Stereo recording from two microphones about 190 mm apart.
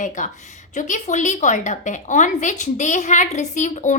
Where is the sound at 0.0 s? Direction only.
40° left (ahead or behind).